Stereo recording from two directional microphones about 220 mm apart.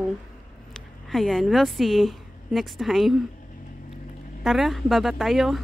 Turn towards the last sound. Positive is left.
turn(degrees=0)  # may be behind; listen again after turning